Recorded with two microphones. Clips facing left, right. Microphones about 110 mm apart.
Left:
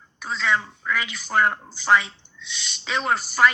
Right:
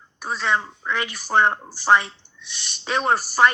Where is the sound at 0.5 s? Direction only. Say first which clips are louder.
Even; 25° right (ahead or behind).